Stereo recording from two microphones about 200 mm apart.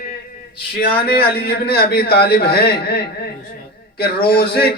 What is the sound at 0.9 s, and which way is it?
Speech, 50° left (ahead or behind).